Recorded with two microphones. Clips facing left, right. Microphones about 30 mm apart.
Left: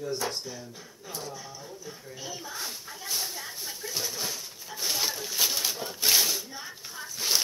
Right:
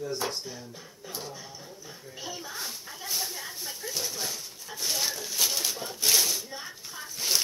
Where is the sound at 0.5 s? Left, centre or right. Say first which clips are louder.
Left 1 dB; centre.